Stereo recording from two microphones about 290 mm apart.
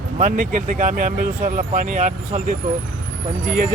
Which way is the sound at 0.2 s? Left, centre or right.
Right.